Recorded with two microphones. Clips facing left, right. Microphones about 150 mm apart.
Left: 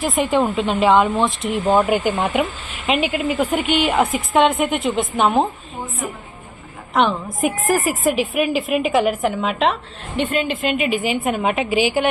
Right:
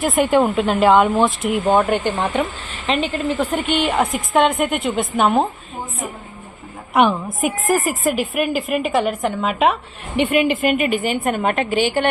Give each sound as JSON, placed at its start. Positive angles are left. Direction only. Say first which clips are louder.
{"t": 0.0, "sound": "speech", "louder": "right 2 dB", "side_deg": 0}
{"t": 6.9, "sound": "a woman's voice", "louder": "right 2 dB", "side_deg": -10}
{"t": 10.4, "sound": "a woman's voice", "louder": "right 5 dB", "side_deg": -60}
{"t": 10.7, "sound": "speech", "louder": "right 1 dB", "side_deg": 0}